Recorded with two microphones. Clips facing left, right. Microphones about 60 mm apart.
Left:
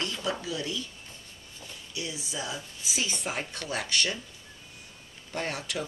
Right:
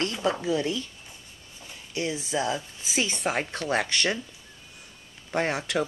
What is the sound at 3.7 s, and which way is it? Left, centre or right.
Speech, right.